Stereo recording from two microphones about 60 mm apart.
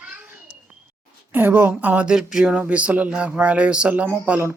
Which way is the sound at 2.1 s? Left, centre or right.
Centre.